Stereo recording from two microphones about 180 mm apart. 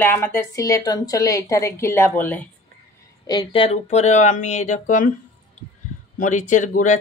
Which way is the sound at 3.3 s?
25° left (ahead or behind).